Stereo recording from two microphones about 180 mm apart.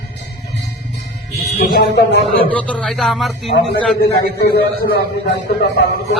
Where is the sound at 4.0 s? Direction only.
60° left (ahead or behind).